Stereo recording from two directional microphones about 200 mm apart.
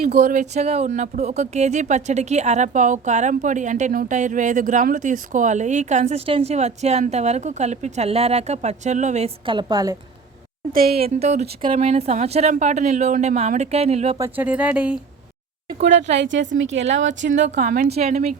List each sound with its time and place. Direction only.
0.0 s speech: 45° right (ahead or behind); by 10.0 s 20° right (ahead or behind)
10.7 s a woman's voice: 45° right (ahead or behind)
10.9 s speech: 30° right (ahead or behind)
14.2 s speech: 10° right (ahead or behind)
15.8 s speech: 35° right (ahead or behind)
16.1 s a woman's voice: 65° right (ahead or behind)
17.3 s speech: 35° right (ahead or behind)
17.9 s speech: 30° right (ahead or behind)